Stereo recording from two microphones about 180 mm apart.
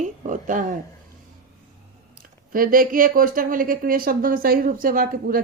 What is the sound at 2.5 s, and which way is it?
Speech, 50° right (ahead or behind).